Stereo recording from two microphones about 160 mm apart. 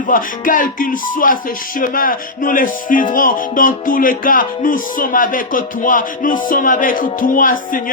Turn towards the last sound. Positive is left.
turn(degrees=60)  # may be behind; listen again after turning